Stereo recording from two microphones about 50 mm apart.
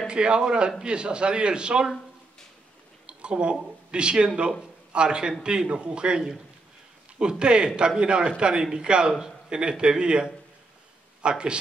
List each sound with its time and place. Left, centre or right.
0.0 s a man's voice: centre
3.1 s a man's voice: centre